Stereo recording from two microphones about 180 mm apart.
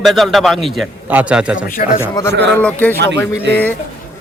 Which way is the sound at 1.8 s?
50° left (ahead or behind).